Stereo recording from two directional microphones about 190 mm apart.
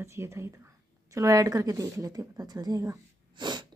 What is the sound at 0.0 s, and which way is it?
A woman's voice, 15° right (ahead or behind).